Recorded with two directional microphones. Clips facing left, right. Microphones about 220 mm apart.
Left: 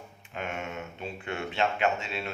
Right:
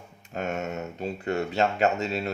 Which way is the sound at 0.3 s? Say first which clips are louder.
Right 5 dB; 40° right (ahead or behind).